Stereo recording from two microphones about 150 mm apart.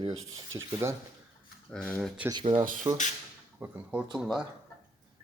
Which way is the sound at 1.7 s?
10° left (ahead or behind).